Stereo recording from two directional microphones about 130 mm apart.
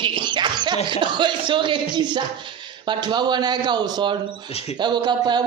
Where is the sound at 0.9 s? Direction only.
35° right (ahead or behind).